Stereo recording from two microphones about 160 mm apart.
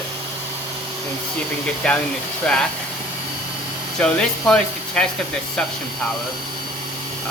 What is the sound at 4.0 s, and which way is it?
Speech, 5° left (ahead or behind).